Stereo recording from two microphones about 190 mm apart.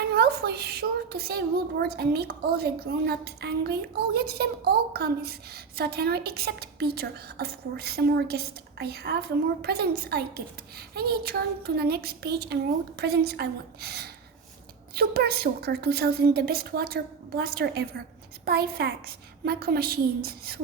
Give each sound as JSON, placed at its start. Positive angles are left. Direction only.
{"t": 0.1, "sound": "a woman's voice", "side_deg": -55}